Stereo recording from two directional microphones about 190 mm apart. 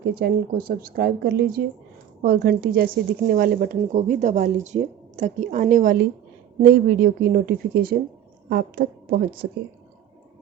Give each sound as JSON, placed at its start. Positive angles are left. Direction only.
{"t": 0.0, "sound": "a woman's voice", "side_deg": -55}